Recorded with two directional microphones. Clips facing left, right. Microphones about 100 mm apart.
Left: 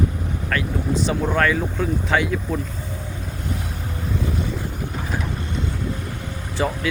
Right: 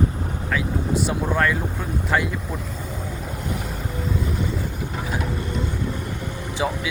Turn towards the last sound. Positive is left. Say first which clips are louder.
# left 1 dB
turn(degrees=-10)  # may be behind; listen again after turning